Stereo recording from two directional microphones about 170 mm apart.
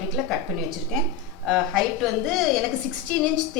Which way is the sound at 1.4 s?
Centre (ahead or behind).